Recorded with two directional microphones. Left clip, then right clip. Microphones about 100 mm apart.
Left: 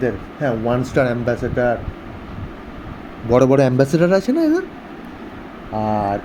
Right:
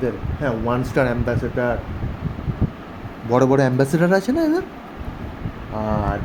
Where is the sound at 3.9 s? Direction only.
10° left (ahead or behind).